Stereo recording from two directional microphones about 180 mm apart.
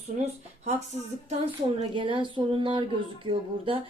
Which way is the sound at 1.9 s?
25° right (ahead or behind).